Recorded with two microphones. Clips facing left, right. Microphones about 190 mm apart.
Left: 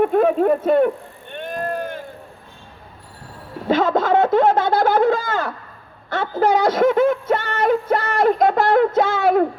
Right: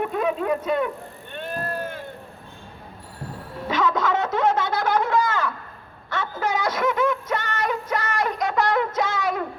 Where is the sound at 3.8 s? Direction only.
55° left (ahead or behind).